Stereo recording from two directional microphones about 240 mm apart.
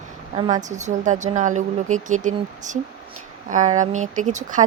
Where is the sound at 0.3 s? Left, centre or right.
Right.